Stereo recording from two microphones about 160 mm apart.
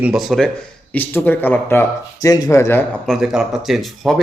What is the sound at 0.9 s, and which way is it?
A man's voice, 10° left (ahead or behind).